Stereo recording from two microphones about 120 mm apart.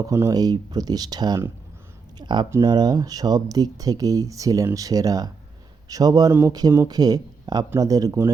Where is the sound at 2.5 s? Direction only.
30° right (ahead or behind).